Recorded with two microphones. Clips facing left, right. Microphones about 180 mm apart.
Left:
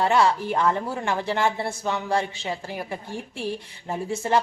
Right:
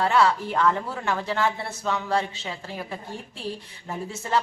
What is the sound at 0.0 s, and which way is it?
A woman's voice, 15° left (ahead or behind).